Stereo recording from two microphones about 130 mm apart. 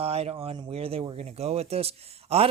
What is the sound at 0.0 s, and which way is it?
A man's voice, 50° right (ahead or behind).